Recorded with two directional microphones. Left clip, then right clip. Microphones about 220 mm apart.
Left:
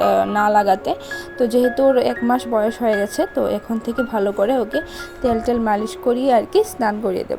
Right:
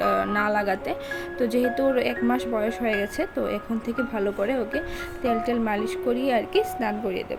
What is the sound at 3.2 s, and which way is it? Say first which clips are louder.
Speech: left 8 dB; 20° left (ahead or behind).